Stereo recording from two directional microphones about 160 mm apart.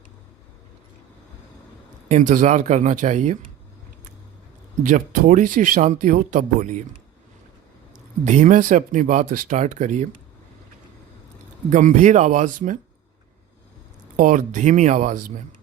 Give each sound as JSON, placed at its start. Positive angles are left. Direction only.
{"t": 2.0, "sound": "speech", "side_deg": -50}
{"t": 4.8, "sound": "speech", "side_deg": -55}
{"t": 8.2, "sound": "speech", "side_deg": -50}
{"t": 11.7, "sound": "speech", "side_deg": -50}
{"t": 14.2, "sound": "speech", "side_deg": -55}